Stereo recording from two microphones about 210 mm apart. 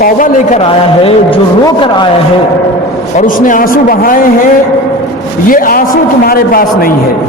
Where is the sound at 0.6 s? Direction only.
25° left (ahead or behind).